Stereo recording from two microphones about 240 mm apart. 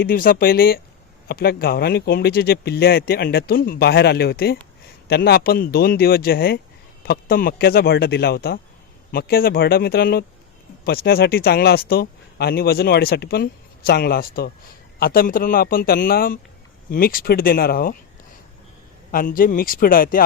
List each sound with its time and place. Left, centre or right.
0.0 s speech: left
19.1 s speech: left